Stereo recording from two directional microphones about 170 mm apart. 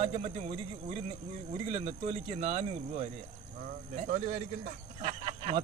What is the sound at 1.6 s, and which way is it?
A man's voice, 35° right (ahead or behind).